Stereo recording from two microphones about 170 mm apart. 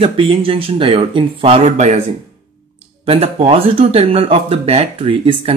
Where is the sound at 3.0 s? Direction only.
35° right (ahead or behind).